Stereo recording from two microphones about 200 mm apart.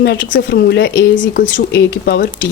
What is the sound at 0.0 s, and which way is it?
Speech, 55° left (ahead or behind).